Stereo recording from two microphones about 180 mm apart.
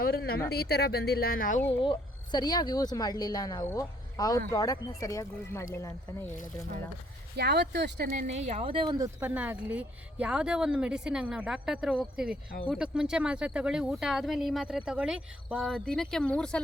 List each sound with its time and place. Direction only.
0.0 s speech: 60° left (ahead or behind)
1.7 s a woman's voice: 25° left (ahead or behind)
7.3 s speech: 65° right (ahead or behind)
8.3 s a woman's voice: 40° right (ahead or behind)
8.6 s speech: 30° right (ahead or behind)
9.2 s speech: 10° right (ahead or behind)